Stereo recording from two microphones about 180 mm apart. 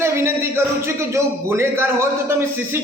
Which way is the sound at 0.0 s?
15° right (ahead or behind).